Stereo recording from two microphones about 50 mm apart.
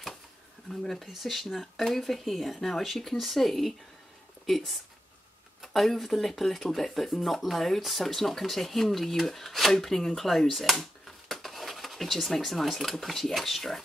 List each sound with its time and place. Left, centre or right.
0.7 s speech: centre